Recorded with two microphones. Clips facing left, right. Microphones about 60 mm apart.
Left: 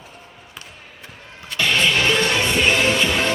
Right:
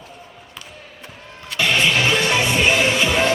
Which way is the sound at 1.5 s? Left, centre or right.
Centre.